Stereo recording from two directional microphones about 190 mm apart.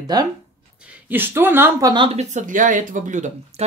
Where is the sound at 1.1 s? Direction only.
10° right (ahead or behind).